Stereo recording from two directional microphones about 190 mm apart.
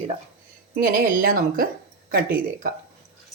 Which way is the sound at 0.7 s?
50° right (ahead or behind).